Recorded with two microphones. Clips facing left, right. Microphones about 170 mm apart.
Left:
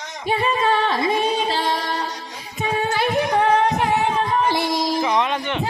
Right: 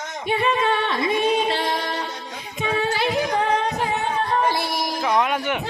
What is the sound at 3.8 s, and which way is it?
Music, 85° left.